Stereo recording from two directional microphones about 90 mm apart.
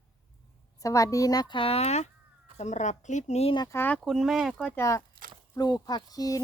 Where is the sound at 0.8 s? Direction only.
40° left (ahead or behind).